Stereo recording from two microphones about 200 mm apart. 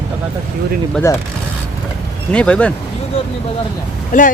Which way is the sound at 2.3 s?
5° left (ahead or behind).